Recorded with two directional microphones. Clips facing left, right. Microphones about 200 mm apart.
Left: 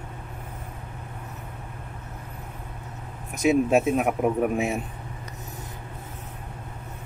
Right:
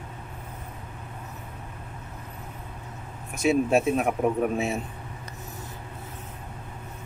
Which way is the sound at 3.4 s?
15° left (ahead or behind).